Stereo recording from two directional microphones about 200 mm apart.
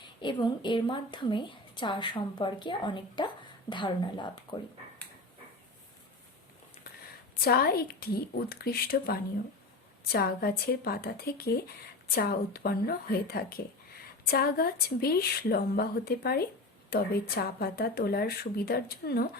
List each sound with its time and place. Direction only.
0.0 s a woman's voice: 20° left (ahead or behind)
7.4 s a woman's voice: 50° left (ahead or behind)